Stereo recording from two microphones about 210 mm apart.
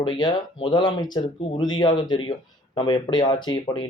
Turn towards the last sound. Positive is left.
turn(degrees=20)  # may be behind; listen again after turning